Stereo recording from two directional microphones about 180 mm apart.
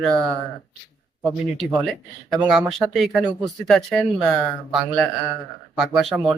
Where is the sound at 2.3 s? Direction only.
Centre (ahead or behind).